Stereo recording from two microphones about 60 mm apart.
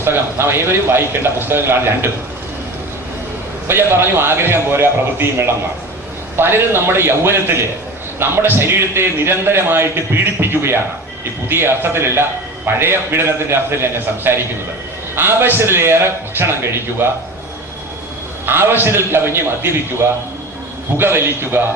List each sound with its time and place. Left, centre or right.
0.0 s a man's voice: right
3.7 s a man's voice: right
17.0 s a man's voice: right
18.4 s a man's voice: right